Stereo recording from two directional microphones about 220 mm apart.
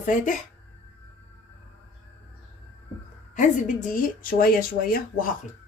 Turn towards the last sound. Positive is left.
turn(degrees=40)  # may be behind; listen again after turning